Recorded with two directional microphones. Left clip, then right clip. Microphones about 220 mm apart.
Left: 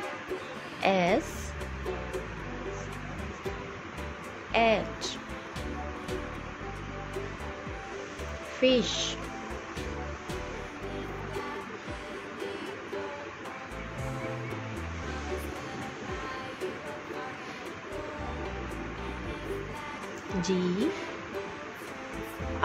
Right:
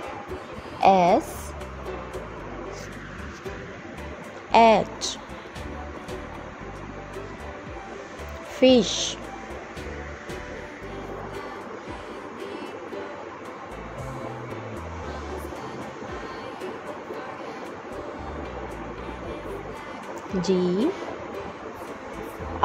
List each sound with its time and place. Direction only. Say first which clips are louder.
0.7 s a woman's voice: right 8 dB; 15° right (ahead or behind)
4.5 s a sound: right 9 dB; 30° right (ahead or behind)
8.5 s speech: right 7 dB; 25° right (ahead or behind)
20.4 s speech: right 7 dB; 15° right (ahead or behind)